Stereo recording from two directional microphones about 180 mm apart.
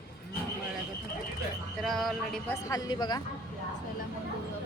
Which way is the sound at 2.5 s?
20° left (ahead or behind).